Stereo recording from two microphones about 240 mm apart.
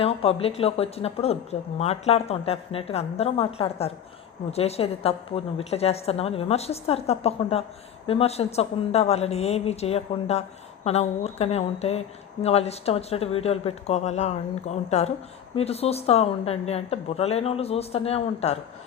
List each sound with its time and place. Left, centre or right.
0.0 s speech: left